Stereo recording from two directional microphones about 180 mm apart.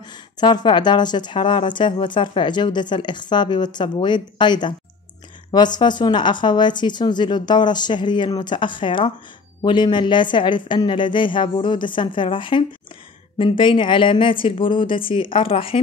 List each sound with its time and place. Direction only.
0.4 s a woman's voice: 25° left (ahead or behind)